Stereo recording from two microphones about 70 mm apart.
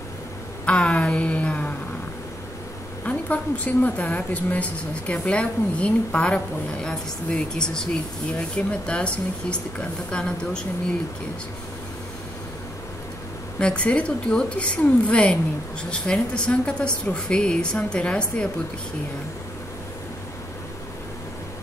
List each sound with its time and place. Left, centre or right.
0.7 s a sound: centre
3.1 s a woman's voice: left
13.6 s a woman's voice: centre